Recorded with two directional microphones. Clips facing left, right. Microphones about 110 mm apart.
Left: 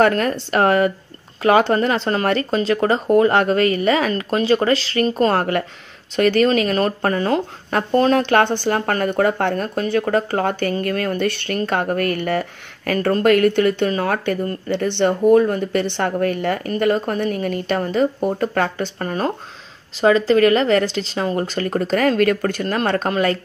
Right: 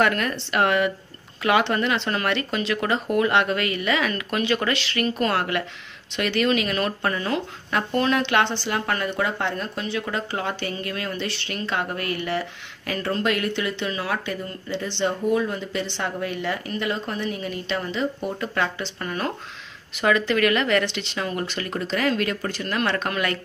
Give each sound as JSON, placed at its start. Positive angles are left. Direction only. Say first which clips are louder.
{"t": 0.0, "sound": "speech", "louder": "left 6 dB", "side_deg": 35}